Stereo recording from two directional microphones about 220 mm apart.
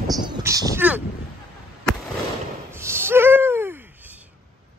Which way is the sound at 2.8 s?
10° right (ahead or behind).